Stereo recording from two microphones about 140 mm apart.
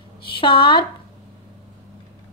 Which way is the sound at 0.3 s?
35° left (ahead or behind).